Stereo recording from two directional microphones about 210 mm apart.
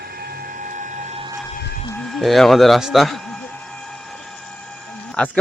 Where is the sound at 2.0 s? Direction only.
Centre (ahead or behind).